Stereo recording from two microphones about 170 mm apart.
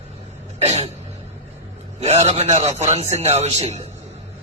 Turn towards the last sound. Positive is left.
turn(degrees=-40)  # may be behind; listen again after turning